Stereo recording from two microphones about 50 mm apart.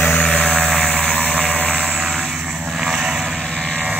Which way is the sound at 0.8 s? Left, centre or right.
Centre.